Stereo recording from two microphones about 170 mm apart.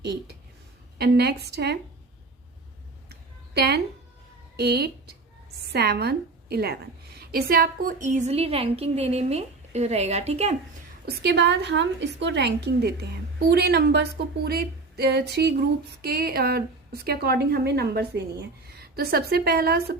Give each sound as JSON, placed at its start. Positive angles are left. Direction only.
{"t": 0.0, "sound": "speech", "side_deg": -75}
{"t": 3.1, "sound": "a sound", "side_deg": -70}
{"t": 4.5, "sound": "a woman's voice", "side_deg": -70}
{"t": 11.0, "sound": "speech", "side_deg": -75}
{"t": 16.0, "sound": "speech", "side_deg": -65}